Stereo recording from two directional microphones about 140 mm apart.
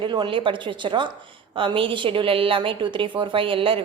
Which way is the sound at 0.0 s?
35° right (ahead or behind).